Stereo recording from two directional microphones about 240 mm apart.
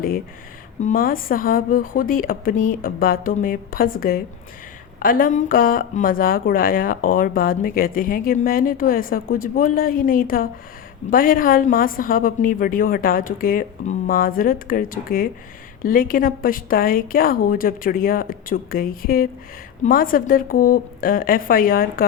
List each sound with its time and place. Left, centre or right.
0.8 s speech: left